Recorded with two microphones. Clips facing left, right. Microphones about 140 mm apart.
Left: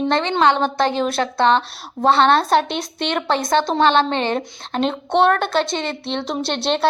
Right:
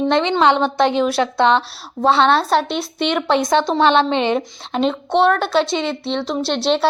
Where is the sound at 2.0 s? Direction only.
Centre (ahead or behind).